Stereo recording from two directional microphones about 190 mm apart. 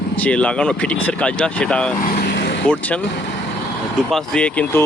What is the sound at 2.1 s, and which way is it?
Vehicle, 50° left (ahead or behind).